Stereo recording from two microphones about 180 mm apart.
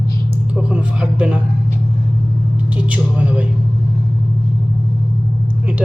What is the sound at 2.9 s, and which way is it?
Speech, 10° right (ahead or behind).